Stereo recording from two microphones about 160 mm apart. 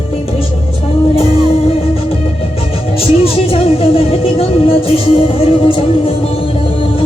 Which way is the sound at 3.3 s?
35° left (ahead or behind).